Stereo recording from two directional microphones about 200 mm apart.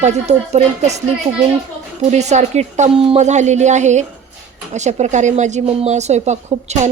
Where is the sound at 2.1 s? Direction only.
35° right (ahead or behind).